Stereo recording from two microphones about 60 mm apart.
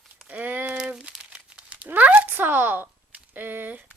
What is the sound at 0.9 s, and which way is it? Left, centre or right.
Crumpling, centre.